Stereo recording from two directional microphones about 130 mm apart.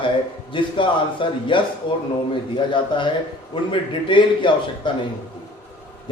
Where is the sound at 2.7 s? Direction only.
40° left (ahead or behind).